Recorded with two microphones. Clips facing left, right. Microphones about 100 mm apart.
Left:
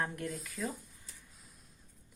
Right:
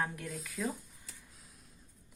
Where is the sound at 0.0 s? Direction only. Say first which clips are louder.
Left 1 dB; centre (ahead or behind).